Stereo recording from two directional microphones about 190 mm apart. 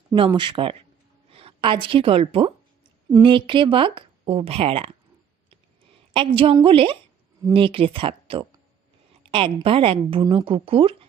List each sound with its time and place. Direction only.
0.1 s a woman's voice: 20° right (ahead or behind)
6.1 s speech: 30° right (ahead or behind)